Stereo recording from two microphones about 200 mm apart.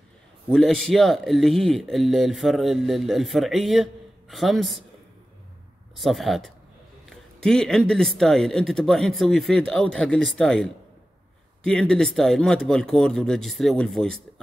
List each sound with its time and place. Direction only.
0.5 s speech: centre (ahead or behind)
5.9 s speech: centre (ahead or behind)